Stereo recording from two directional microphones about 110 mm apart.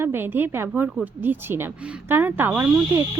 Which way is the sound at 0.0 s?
20° right (ahead or behind).